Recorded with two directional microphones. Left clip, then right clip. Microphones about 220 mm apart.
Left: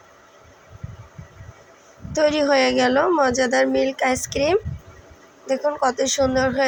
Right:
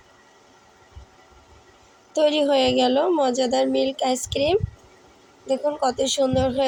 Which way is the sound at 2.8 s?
Centre (ahead or behind).